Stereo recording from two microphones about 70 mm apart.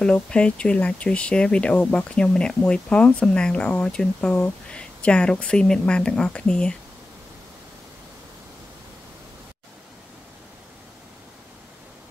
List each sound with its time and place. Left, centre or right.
0.0 s speech: centre